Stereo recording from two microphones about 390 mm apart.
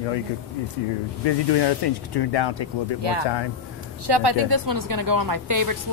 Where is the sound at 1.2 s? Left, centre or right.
Left.